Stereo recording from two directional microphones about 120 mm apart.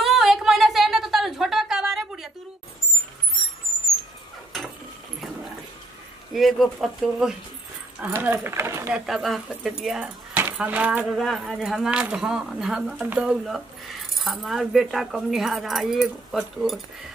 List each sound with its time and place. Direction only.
0.0 s a sound: centre (ahead or behind)
6.3 s speech: centre (ahead or behind)
8.0 s speech: 15° right (ahead or behind)
8.9 s speech: 5° right (ahead or behind)
11.1 s speech: centre (ahead or behind)